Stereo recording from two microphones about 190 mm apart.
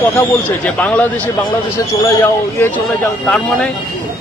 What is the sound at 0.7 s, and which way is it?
Speech, 5° left (ahead or behind).